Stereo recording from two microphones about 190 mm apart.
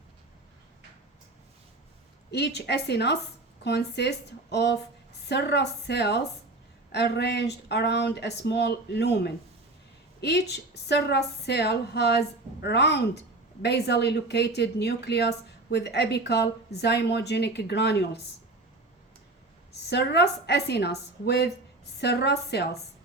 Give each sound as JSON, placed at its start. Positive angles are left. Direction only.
{"t": 2.3, "sound": "speech", "side_deg": 60}
{"t": 19.9, "sound": "speech", "side_deg": 65}